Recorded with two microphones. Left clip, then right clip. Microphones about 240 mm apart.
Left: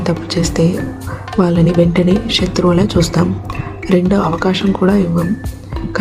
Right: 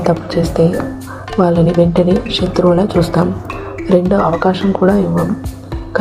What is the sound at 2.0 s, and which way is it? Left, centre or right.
Speech, centre.